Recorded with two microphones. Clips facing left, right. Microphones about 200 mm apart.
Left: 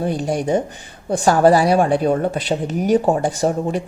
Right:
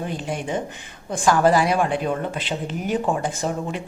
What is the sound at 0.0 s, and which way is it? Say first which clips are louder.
Speech: left 7 dB; 40° left (ahead or behind).